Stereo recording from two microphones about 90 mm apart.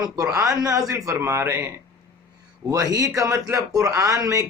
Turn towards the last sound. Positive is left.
turn(degrees=-40)  # may be behind; listen again after turning